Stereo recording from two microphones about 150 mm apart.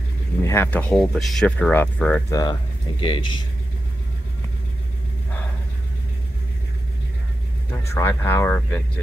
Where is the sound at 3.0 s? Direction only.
35° left (ahead or behind).